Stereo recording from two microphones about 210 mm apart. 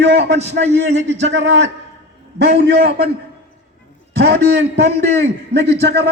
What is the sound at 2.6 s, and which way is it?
Speech, 55° right (ahead or behind).